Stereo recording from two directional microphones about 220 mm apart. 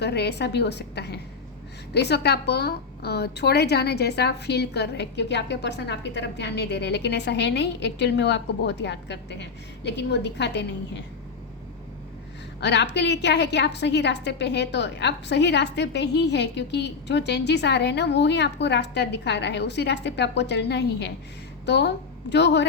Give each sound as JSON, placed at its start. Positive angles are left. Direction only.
{"t": 0.0, "sound": "a woman's voice", "side_deg": 50}
{"t": 12.5, "sound": "a woman's voice", "side_deg": 50}